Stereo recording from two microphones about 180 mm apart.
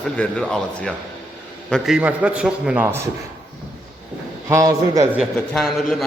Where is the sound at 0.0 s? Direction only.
5° left (ahead or behind); by 3.1 s 10° right (ahead or behind).